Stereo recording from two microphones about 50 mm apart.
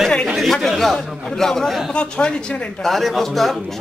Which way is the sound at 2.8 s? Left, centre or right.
Centre.